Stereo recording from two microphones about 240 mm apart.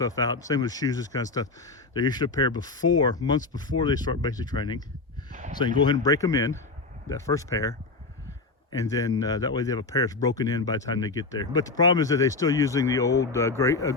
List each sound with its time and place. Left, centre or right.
0.0 s speech: centre
5.3 s a sound: right
5.5 s speech: centre